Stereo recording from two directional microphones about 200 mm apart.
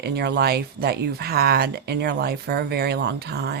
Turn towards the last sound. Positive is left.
turn(degrees=-55)  # may be behind; listen again after turning